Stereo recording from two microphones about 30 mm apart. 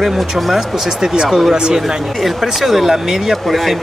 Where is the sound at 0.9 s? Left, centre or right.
Right.